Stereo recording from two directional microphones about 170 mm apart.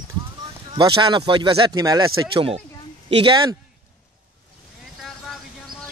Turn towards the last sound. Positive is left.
turn(degrees=0)  # may be behind; listen again after turning